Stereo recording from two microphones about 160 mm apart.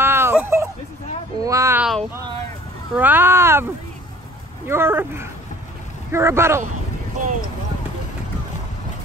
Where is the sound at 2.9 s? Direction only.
10° right (ahead or behind).